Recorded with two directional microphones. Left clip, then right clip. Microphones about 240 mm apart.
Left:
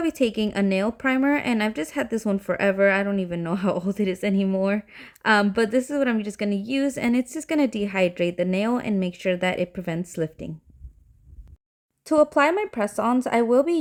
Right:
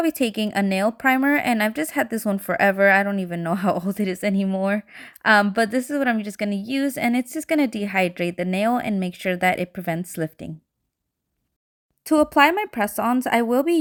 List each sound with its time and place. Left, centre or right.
0.0 s speech: centre
12.0 s speech: centre